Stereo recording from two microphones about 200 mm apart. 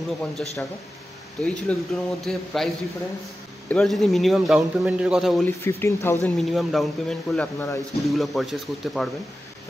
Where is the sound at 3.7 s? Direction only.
Centre (ahead or behind).